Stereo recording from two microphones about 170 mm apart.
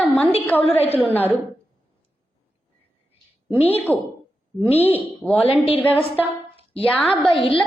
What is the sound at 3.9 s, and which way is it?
Speech, 10° left (ahead or behind).